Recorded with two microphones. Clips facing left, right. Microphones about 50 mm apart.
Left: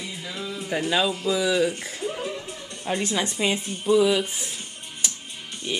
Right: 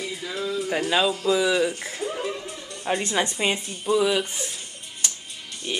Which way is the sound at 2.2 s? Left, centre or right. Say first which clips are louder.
Right 1 dB; right.